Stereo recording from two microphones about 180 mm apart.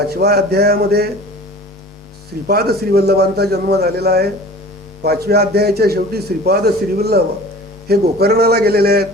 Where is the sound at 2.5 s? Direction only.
60° right (ahead or behind).